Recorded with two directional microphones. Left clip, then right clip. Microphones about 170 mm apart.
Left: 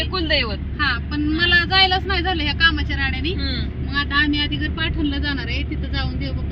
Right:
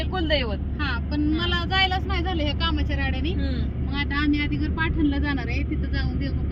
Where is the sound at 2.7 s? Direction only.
10° right (ahead or behind).